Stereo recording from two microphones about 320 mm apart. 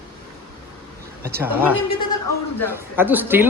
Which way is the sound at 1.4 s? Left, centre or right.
Centre.